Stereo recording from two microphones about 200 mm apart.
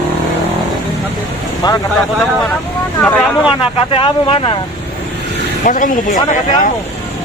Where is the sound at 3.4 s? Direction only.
25° left (ahead or behind).